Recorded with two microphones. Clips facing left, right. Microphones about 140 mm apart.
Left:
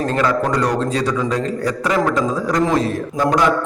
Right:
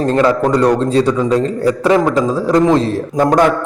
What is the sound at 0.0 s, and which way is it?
A man's voice, 30° right (ahead or behind).